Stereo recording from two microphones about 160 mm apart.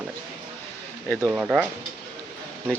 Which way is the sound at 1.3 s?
10° right (ahead or behind).